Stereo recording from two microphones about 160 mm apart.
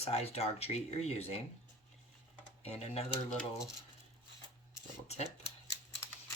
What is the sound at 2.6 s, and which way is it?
Speech, 40° left (ahead or behind).